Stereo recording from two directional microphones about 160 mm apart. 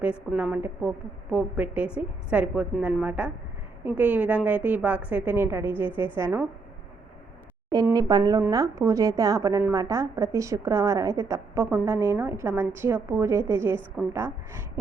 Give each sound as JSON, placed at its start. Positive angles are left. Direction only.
{"t": 0.0, "sound": "a woman's voice", "side_deg": -10}
{"t": 7.9, "sound": "a woman's voice", "side_deg": -25}